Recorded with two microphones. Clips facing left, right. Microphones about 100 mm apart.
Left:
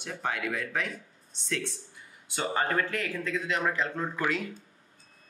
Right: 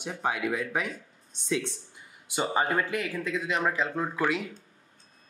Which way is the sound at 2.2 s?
15° right (ahead or behind).